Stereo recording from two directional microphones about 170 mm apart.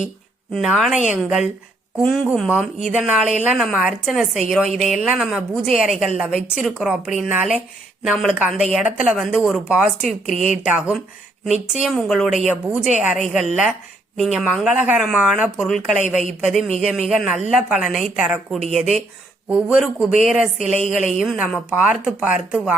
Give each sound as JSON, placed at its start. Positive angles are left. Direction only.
{"t": 0.5, "sound": "speech", "side_deg": 0}
{"t": 20.7, "sound": "a woman's voice", "side_deg": 45}
{"t": 21.2, "sound": "speech", "side_deg": -5}